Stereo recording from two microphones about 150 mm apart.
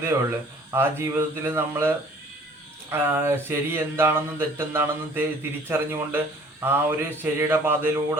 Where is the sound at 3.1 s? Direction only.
15° right (ahead or behind).